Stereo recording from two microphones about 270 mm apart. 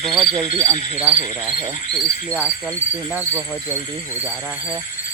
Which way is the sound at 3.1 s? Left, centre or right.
Centre.